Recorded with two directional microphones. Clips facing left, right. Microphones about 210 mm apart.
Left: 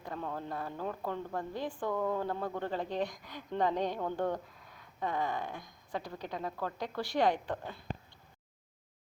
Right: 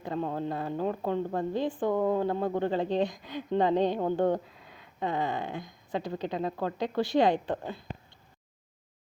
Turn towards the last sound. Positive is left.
turn(degrees=-25)  # may be behind; listen again after turning